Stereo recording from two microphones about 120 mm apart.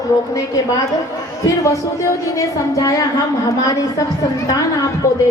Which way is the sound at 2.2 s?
25° left (ahead or behind).